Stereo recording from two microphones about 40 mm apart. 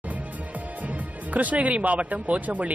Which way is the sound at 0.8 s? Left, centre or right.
Right.